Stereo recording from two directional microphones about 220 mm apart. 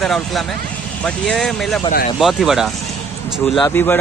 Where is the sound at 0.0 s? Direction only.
Centre (ahead or behind).